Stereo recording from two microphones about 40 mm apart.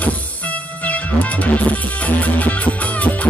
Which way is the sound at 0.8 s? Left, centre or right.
Left.